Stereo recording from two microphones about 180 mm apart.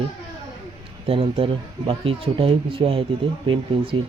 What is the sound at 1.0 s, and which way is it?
Speech, 30° right (ahead or behind).